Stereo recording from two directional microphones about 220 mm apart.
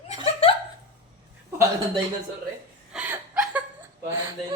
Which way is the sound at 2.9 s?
5° right (ahead or behind).